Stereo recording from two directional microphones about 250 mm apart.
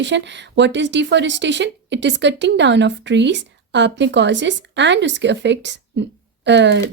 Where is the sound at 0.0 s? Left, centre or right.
Right.